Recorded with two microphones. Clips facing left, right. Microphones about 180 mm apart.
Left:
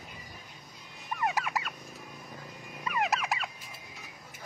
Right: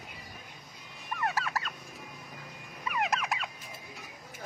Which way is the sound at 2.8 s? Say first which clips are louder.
Left 1 dB; centre (ahead or behind).